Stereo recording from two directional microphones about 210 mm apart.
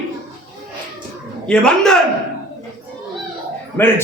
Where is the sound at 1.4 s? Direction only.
5° left (ahead or behind).